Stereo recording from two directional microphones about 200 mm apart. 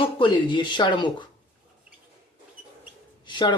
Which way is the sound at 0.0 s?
25° left (ahead or behind).